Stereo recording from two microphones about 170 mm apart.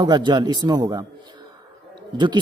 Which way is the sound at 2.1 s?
25° right (ahead or behind).